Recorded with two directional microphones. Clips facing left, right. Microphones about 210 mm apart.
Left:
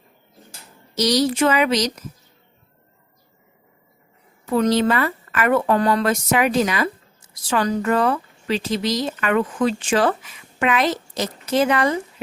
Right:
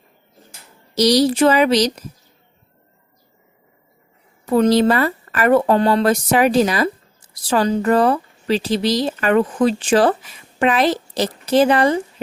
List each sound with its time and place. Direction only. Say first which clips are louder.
0.9 s speech: right 4 dB; 35° right (ahead or behind)
4.4 s speech: right 4 dB; 35° right (ahead or behind)